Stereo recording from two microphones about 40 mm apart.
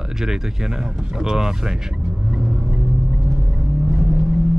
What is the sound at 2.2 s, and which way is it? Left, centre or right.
Vehicle, centre.